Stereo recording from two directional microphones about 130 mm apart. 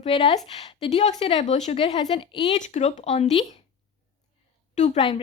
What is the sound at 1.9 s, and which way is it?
Speech, 35° left (ahead or behind).